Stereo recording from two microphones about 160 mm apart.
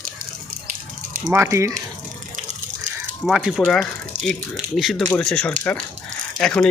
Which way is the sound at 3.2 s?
Centre (ahead or behind).